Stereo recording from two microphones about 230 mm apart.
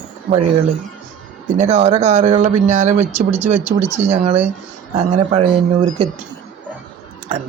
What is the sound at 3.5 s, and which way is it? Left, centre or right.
Speech, centre.